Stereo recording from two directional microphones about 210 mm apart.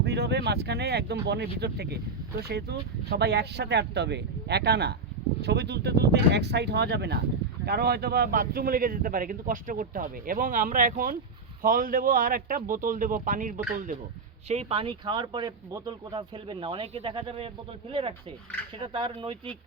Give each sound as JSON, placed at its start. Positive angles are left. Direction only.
{"t": 0.0, "sound": "speech", "side_deg": -55}